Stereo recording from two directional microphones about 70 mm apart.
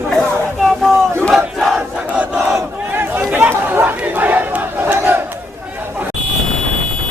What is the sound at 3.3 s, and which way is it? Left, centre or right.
Crowd, right.